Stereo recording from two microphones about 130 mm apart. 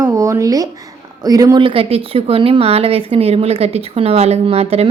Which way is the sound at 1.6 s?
45° right (ahead or behind).